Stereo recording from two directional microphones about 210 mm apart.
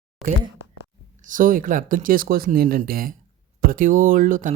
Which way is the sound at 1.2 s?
40° right (ahead or behind).